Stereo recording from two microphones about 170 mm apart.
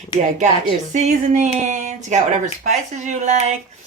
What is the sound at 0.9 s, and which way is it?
Speech, 45° right (ahead or behind).